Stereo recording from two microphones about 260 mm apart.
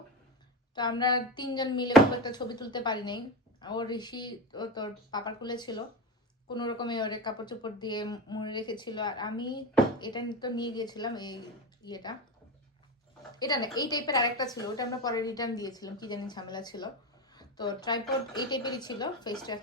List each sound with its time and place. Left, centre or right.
0.8 s speech: centre
13.4 s speech: centre